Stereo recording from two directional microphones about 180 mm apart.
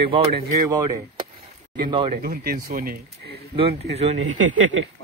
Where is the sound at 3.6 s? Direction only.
35° right (ahead or behind).